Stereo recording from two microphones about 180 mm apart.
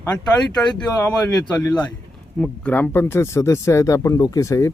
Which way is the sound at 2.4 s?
10° left (ahead or behind).